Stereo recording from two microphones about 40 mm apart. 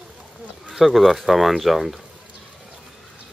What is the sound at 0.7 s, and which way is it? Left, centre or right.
Speech, centre.